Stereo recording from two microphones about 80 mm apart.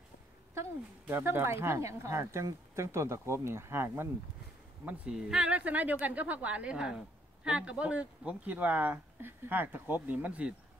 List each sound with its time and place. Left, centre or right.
1.0 s speech: right
5.1 s a woman's voice: centre